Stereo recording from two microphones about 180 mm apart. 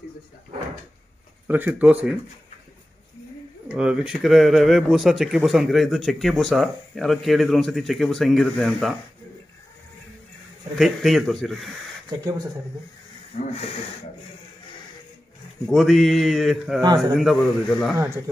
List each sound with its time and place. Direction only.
1.5 s speech: 10° right (ahead or behind)
3.6 s speech: 5° right (ahead or behind)
10.8 s speech: centre (ahead or behind)
12.1 s speech: 20° right (ahead or behind)
13.3 s speech: 45° left (ahead or behind)
15.6 s speech: centre (ahead or behind)
16.8 s speech: 20° right (ahead or behind)
17.1 s speech: centre (ahead or behind)
17.9 s speech: 15° right (ahead or behind)